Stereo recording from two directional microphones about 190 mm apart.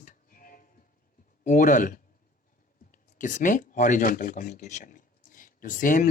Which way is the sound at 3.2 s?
45° left (ahead or behind).